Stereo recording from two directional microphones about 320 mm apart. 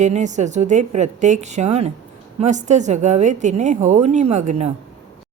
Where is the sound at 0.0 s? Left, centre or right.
Right.